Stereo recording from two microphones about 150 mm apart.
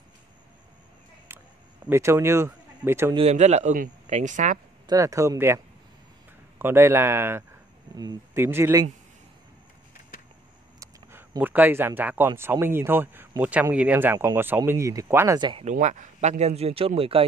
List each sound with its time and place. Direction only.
1.3 s a sound: 15° right (ahead or behind)
1.9 s speech: 20° right (ahead or behind)
3.2 s speech: 45° right (ahead or behind)
3.7 s speech: 60° right (ahead or behind)
4.8 s speech: 20° right (ahead or behind)
6.6 s speech: 15° right (ahead or behind)
10.8 s speech: 15° right (ahead or behind)
15.3 s speech: 30° right (ahead or behind)
15.6 s speech: 55° right (ahead or behind)